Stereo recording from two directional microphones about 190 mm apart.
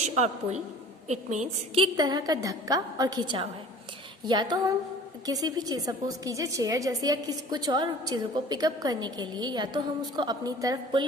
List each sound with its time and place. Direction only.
0.0 s a woman's voice: 35° right (ahead or behind)
1.8 s a woman's voice: 20° right (ahead or behind)